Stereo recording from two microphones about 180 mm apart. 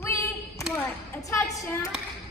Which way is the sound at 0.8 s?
15° left (ahead or behind).